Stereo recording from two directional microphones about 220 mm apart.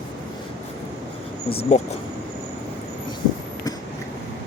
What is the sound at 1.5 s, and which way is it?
Speech, 30° left (ahead or behind).